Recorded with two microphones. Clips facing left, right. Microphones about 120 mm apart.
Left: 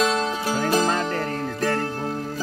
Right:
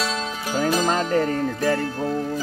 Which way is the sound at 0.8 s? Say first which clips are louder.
Right 3 dB; 10° right (ahead or behind).